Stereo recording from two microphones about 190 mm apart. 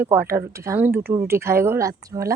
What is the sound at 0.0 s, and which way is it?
Speech, 10° right (ahead or behind).